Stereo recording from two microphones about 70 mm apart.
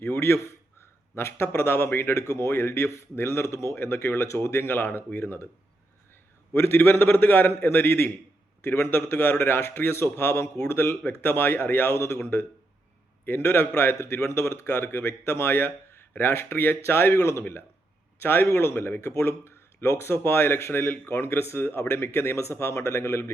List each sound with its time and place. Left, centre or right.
0.0 s a man's voice: left
6.5 s a man's voice: left